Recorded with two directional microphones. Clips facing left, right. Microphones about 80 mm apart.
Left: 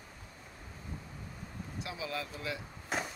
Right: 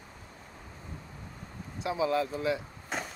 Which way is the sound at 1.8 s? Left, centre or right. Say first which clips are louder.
Right 11 dB; right.